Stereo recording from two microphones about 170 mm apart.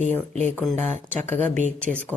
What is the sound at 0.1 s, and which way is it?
Speech, 10° left (ahead or behind).